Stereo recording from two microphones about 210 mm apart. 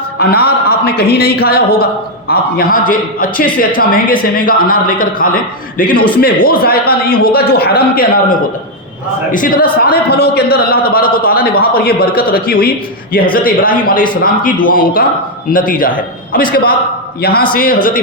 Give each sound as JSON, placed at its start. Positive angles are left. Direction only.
{"t": 0.2, "sound": "a man's voice", "side_deg": 50}